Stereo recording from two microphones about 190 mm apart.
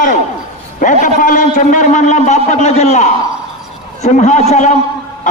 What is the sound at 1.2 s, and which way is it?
A man's voice, 45° left (ahead or behind).